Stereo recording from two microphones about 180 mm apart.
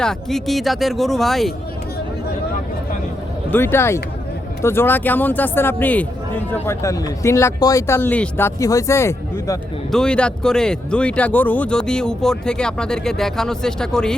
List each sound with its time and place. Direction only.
0.0 s speech: centre (ahead or behind)
3.5 s speech: 15° left (ahead or behind)
9.9 s speech: 5° left (ahead or behind)